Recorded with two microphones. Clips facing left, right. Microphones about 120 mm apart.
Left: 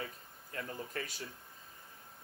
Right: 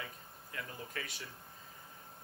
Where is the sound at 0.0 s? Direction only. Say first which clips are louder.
Left 3 dB; 40° left (ahead or behind).